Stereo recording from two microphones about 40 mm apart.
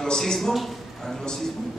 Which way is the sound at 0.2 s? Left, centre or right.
Centre.